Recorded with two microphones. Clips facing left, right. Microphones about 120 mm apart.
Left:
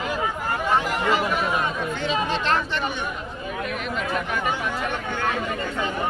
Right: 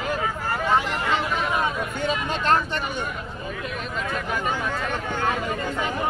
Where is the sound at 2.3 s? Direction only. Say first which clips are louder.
Right 1 dB; 45° right (ahead or behind).